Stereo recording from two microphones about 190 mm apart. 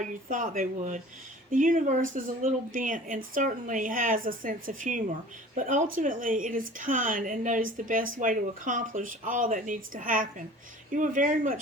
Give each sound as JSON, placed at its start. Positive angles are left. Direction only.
{"t": 0.0, "sound": "speech", "side_deg": -45}